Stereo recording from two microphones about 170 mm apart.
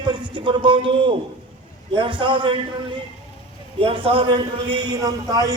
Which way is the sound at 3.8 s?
35° right (ahead or behind).